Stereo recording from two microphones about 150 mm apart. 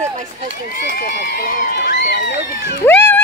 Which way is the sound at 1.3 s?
90° left.